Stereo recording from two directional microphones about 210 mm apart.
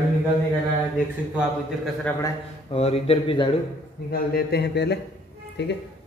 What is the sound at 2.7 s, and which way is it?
Speech, 30° left (ahead or behind).